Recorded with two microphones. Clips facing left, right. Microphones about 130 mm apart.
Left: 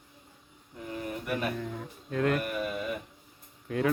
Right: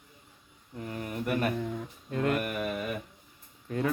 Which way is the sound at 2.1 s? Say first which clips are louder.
Left 1 dB; 5° right (ahead or behind).